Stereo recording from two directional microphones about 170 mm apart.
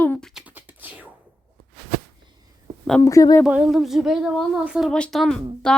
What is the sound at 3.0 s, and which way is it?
Speech, 20° left (ahead or behind).